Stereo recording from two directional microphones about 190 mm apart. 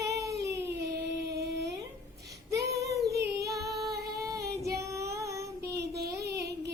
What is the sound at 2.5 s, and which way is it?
Child singing, 15° right (ahead or behind).